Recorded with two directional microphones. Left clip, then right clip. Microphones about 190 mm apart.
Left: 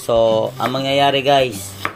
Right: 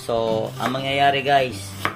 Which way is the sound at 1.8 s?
10° left (ahead or behind).